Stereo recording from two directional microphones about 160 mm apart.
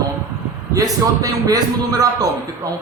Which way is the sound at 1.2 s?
25° right (ahead or behind).